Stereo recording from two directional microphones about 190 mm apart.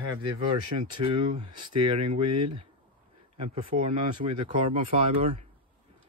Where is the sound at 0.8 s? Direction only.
25° right (ahead or behind).